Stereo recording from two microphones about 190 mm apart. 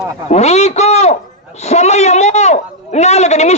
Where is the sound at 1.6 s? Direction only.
35° left (ahead or behind).